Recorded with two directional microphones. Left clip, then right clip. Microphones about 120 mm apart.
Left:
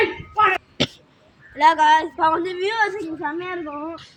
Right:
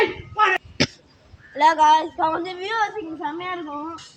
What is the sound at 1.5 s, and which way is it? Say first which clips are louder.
A woman's voice: left 1 dB; 25° right (ahead or behind).